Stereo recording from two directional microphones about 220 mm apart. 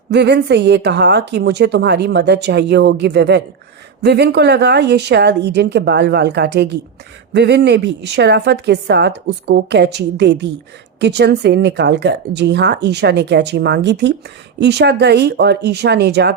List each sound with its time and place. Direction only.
0.1 s a woman's voice: 50° right (ahead or behind)